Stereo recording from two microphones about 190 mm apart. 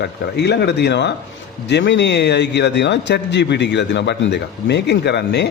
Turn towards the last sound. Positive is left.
turn(degrees=65)  # may be behind; listen again after turning